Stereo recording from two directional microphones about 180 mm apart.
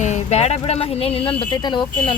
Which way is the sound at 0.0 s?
40° left (ahead or behind).